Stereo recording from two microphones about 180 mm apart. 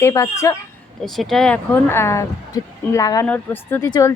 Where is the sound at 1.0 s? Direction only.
Centre (ahead or behind); by 4.1 s 20° left (ahead or behind).